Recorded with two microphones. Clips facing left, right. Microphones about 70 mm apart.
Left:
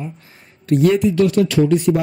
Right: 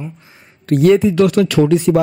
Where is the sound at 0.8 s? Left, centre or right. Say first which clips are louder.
Right 4 dB; right.